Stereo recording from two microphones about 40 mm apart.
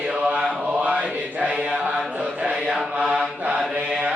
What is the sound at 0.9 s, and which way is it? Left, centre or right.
Chant, right.